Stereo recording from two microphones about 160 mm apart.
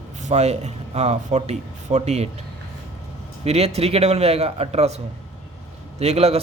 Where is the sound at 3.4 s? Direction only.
40° right (ahead or behind).